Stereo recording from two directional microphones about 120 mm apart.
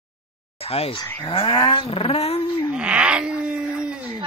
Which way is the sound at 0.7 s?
55° left (ahead or behind).